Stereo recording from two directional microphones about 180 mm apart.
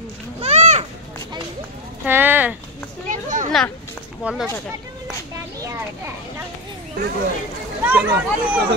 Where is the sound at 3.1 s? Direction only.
45° right (ahead or behind).